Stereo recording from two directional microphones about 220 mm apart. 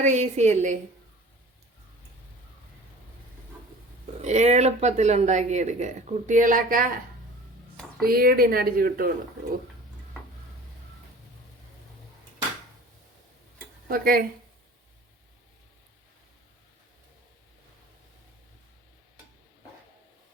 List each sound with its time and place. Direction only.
0.0 s speech: 35° right (ahead or behind)
4.2 s speech: 30° right (ahead or behind)
8.0 s speech: 45° right (ahead or behind)
13.8 s speech: 45° right (ahead or behind)